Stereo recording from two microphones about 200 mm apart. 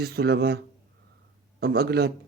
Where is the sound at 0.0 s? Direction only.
55° right (ahead or behind).